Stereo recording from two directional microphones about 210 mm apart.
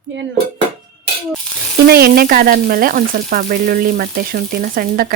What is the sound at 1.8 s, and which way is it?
Frying, 45° right (ahead or behind).